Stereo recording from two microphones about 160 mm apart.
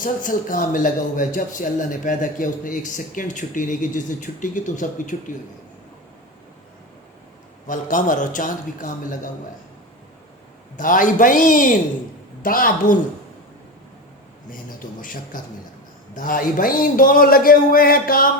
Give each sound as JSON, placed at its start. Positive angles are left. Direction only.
{"t": 0.0, "sound": "a man's voice", "side_deg": 55}
{"t": 7.7, "sound": "a man's voice", "side_deg": 55}
{"t": 10.8, "sound": "a man's voice", "side_deg": 55}
{"t": 14.5, "sound": "a man's voice", "side_deg": 60}